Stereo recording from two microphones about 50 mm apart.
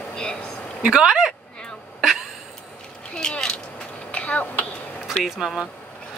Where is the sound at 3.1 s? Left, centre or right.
Left.